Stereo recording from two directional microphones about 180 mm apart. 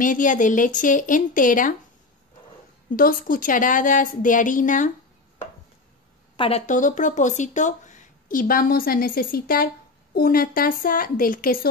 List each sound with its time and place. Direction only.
0.0 s a woman's voice: 45° left (ahead or behind)
3.0 s a woman's voice: 50° left (ahead or behind)
6.3 s a woman's voice: 30° left (ahead or behind)
6.6 s a woman's voice: 45° left (ahead or behind)